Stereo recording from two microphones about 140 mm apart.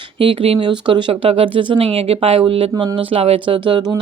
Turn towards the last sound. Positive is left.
turn(degrees=-35)  # may be behind; listen again after turning